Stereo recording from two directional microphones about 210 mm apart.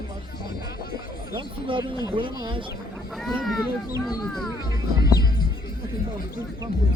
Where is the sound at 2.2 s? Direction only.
25° right (ahead or behind).